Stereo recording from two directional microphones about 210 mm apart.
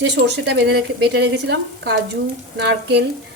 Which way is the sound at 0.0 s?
55° right (ahead or behind).